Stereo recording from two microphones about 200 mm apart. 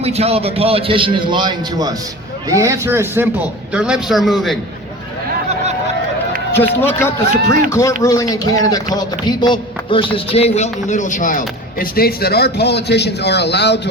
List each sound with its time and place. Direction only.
0.0 s a man's voice: 30° right (ahead or behind); by 4.5 s centre (ahead or behind)
6.5 s a man's voice: 10° left (ahead or behind); by 13.8 s 55° left (ahead or behind)